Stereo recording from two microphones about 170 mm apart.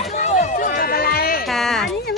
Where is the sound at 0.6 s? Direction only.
60° left (ahead or behind).